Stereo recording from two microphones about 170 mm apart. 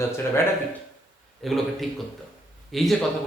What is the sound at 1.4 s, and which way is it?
Speech, centre (ahead or behind).